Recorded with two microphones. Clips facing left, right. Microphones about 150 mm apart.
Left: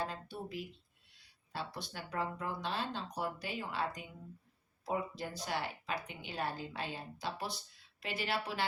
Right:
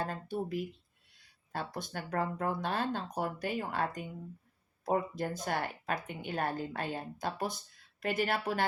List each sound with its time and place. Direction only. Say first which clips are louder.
0.0 s speech: right 5 dB; 50° right (ahead or behind)